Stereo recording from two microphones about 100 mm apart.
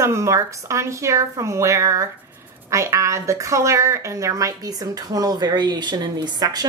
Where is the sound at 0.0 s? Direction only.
30° right (ahead or behind).